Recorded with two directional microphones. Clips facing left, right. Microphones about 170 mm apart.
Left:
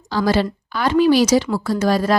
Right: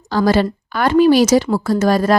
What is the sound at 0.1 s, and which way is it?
A woman's voice, 50° right (ahead or behind).